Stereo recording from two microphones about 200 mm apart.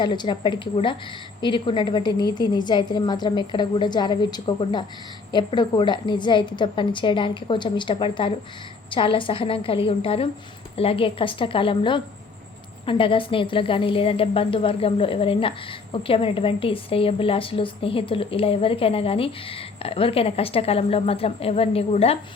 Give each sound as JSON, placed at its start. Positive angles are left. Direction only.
{"t": 0.0, "sound": "a woman's voice", "side_deg": 25}